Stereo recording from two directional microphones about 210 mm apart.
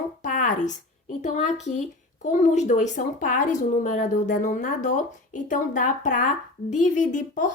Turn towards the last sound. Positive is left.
turn(degrees=35)  # may be behind; listen again after turning